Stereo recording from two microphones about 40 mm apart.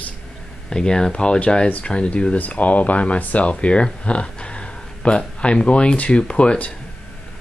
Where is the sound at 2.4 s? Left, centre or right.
Left.